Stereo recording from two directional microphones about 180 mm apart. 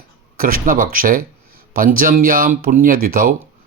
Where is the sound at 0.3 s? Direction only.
50° right (ahead or behind).